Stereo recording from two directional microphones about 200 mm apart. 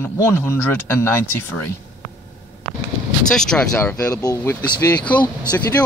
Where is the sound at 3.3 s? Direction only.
5° left (ahead or behind).